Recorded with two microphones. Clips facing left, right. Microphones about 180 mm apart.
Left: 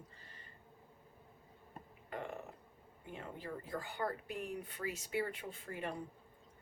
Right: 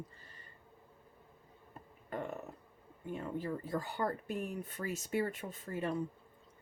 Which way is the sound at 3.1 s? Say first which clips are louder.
Right 7 dB; 45° right (ahead or behind).